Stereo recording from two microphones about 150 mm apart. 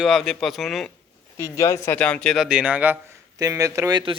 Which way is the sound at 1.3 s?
20° left (ahead or behind).